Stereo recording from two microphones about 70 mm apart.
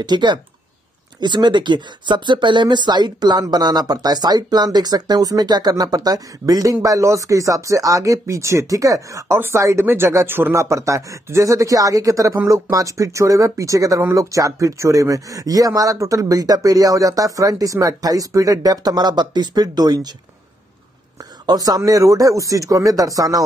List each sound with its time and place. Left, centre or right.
0.0 s speech: right
9.3 s speech: right
10.6 s speech: right
21.5 s speech: right